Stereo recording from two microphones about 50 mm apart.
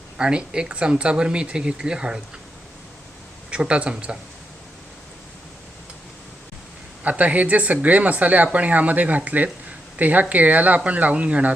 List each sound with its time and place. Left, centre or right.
0.2 s speech: centre
3.5 s speech: right
7.0 s speech: right